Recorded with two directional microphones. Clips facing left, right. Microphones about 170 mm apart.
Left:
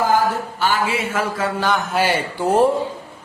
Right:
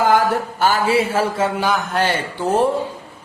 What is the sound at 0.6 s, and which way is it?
Speech, 40° right (ahead or behind).